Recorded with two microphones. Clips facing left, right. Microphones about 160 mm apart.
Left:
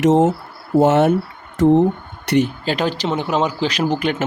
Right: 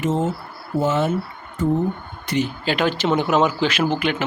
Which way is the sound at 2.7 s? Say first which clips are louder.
Even; 40° left (ahead or behind).